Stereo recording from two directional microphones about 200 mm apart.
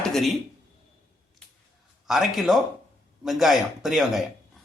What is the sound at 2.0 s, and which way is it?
Speech, centre (ahead or behind).